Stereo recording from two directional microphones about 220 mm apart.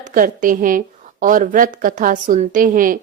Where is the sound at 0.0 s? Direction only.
35° right (ahead or behind).